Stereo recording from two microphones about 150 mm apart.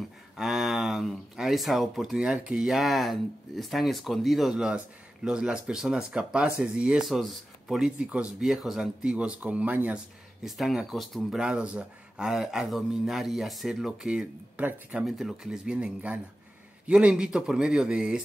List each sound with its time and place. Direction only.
0.4 s speech: centre (ahead or behind)